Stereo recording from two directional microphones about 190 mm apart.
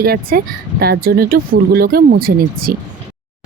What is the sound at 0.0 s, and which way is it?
Speech, 50° right (ahead or behind).